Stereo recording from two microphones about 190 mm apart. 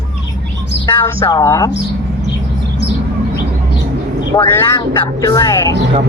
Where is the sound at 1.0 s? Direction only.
20° left (ahead or behind).